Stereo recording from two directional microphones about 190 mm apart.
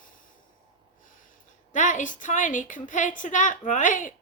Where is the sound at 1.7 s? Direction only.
40° left (ahead or behind).